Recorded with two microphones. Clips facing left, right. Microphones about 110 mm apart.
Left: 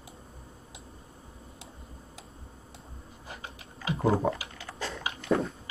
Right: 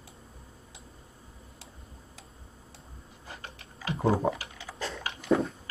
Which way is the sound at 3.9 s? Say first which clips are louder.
Even; centre (ahead or behind).